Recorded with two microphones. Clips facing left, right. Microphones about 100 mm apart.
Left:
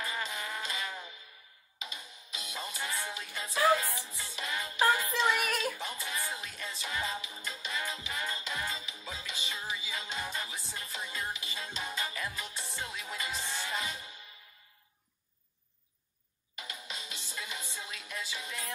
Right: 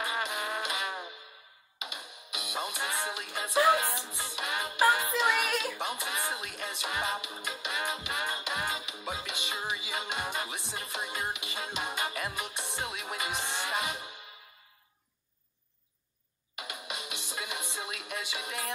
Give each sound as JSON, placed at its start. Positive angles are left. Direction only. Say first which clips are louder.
{"t": 0.0, "sound": "music", "louder": "right 4 dB", "side_deg": -75}
{"t": 5.8, "sound": "music", "louder": "right 4 dB", "side_deg": -75}
{"t": 16.5, "sound": "music", "louder": "right 4 dB", "side_deg": -75}